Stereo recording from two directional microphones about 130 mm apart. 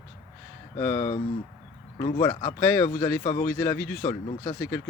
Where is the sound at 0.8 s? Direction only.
45° left (ahead or behind).